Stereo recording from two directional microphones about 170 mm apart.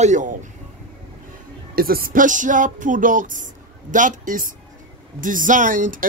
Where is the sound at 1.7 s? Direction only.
60° right (ahead or behind).